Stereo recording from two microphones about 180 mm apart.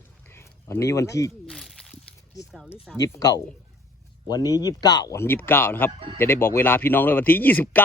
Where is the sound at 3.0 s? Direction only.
20° left (ahead or behind).